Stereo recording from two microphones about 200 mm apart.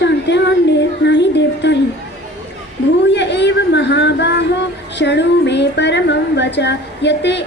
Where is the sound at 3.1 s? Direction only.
60° left (ahead or behind).